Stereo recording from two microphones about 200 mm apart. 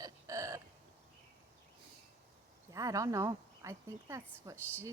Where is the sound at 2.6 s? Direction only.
15° right (ahead or behind).